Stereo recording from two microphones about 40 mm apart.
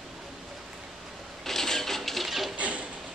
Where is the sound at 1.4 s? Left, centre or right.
Centre.